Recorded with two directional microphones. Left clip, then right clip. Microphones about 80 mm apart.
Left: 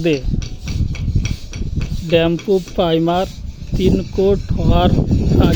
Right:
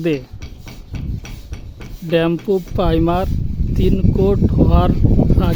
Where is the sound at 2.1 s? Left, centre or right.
Centre.